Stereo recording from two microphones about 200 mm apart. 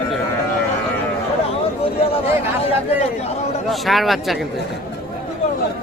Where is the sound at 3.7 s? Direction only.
Centre (ahead or behind).